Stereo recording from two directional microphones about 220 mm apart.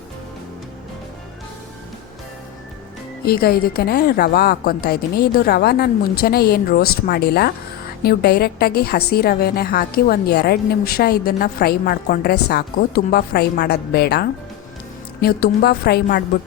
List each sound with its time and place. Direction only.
3.2 s a woman's voice: 45° left (ahead or behind)